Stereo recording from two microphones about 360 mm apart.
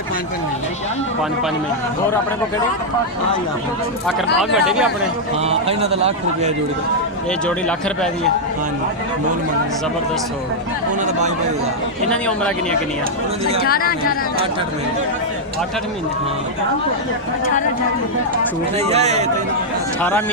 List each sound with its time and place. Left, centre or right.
4.4 s speech: centre
5.4 s a man's voice: centre
7.4 s speech: centre
12.0 s speech: centre
13.7 s speech: left
18.9 s a man's voice: centre
20.0 s speech: centre